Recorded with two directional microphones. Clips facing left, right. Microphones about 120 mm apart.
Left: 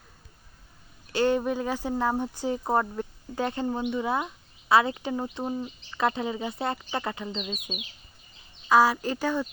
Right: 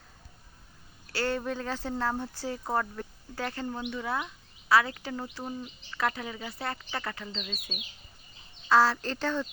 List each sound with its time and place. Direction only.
1.1 s speech: 20° left (ahead or behind)